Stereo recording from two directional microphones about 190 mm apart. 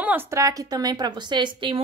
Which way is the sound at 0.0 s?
10° right (ahead or behind).